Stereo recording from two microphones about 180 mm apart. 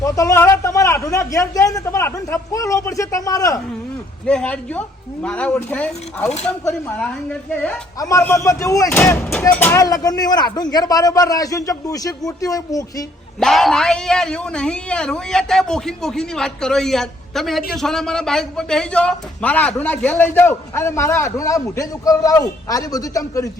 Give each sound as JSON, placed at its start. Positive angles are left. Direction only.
{"t": 0.0, "sound": "a man's voice", "side_deg": 20}
{"t": 4.3, "sound": "a man's voice", "side_deg": 5}
{"t": 7.9, "sound": "speech", "side_deg": 20}
{"t": 13.4, "sound": "a man's voice", "side_deg": 0}